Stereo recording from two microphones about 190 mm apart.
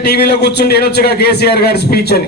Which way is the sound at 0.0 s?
60° left (ahead or behind).